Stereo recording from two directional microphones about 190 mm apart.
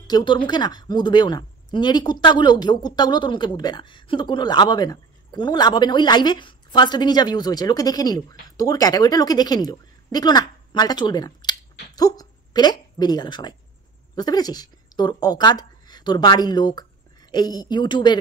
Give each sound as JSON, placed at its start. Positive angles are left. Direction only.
{"t": 0.0, "sound": "a woman's voice", "side_deg": 25}